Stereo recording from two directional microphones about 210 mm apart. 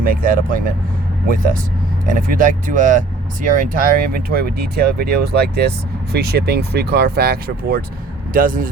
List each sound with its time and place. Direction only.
0.0 s speech: 40° right (ahead or behind)
2.0 s speech: 40° right (ahead or behind)